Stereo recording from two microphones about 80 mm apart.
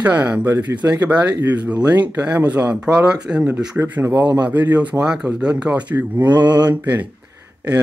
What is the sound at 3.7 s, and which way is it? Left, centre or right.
Speech, right.